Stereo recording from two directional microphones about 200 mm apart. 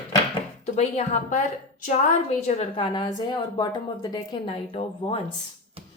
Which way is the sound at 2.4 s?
35° left (ahead or behind).